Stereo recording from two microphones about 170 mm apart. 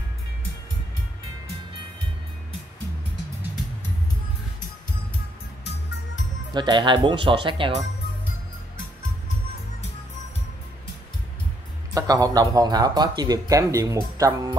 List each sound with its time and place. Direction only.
6.5 s speech: 25° right (ahead or behind)
11.9 s speech: 20° right (ahead or behind)